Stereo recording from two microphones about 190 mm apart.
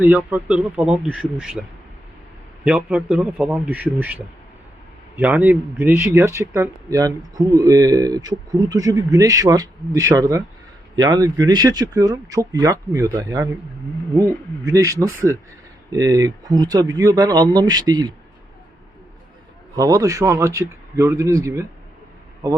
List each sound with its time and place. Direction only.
0.0 s speech: 10° right (ahead or behind)
2.6 s speech: 5° right (ahead or behind)
19.7 s speech: 20° right (ahead or behind)